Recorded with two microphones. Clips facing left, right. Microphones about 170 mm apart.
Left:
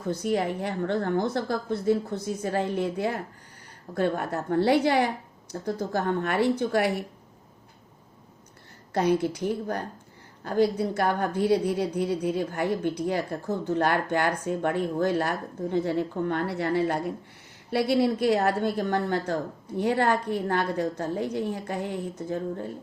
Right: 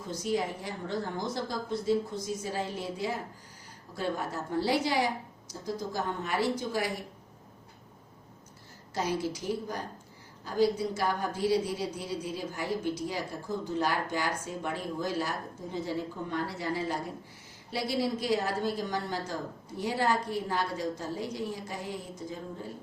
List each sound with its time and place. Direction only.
0.0 s a woman's voice: 60° left (ahead or behind)
8.9 s a woman's voice: 60° left (ahead or behind)